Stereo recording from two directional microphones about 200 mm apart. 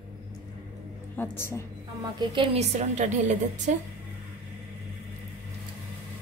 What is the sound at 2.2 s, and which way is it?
A woman's voice, 25° right (ahead or behind).